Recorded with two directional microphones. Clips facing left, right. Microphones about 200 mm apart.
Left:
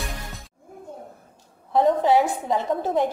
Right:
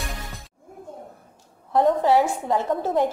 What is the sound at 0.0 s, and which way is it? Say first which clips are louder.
Music: even; centre (ahead or behind).